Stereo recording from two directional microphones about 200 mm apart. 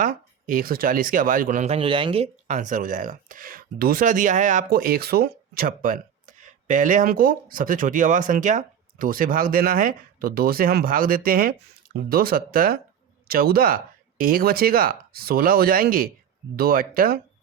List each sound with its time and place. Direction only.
0.0 s speech: 40° right (ahead or behind)